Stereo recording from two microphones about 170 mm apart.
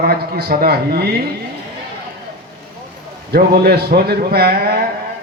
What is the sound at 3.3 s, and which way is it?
A man's voice, 70° right (ahead or behind).